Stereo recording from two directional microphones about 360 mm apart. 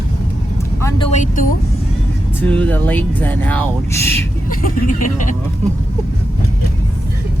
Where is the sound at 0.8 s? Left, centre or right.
Centre.